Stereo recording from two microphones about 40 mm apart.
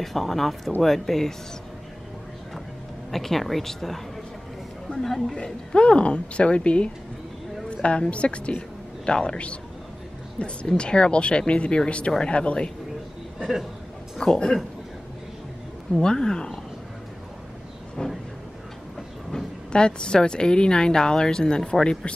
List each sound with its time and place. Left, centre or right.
0.0 s a woman's voice: centre
3.1 s a woman's voice: centre
5.3 s a woman's voice: centre
10.8 s speech: left
14.1 s speech: centre
15.9 s speech: centre
18.0 s vehicle: centre
19.3 s speech: left